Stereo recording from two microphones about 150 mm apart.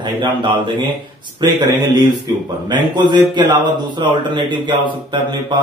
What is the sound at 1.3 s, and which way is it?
A man's voice, 30° right (ahead or behind).